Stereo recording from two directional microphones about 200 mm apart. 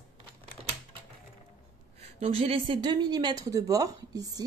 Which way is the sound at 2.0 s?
30° right (ahead or behind).